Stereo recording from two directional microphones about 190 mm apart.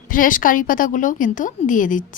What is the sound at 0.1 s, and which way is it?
A woman's voice, 45° left (ahead or behind).